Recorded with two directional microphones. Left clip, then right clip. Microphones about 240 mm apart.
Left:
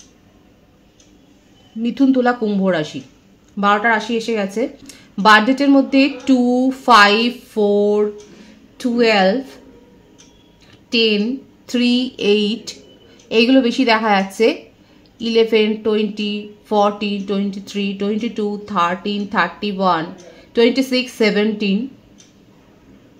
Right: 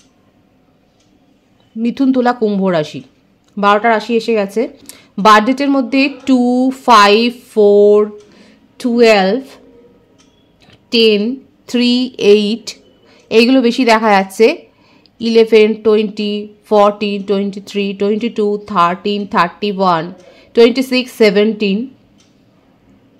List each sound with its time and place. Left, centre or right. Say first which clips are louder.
1.8 s speech: right 2 dB; right
10.9 s speech: right 5 dB; right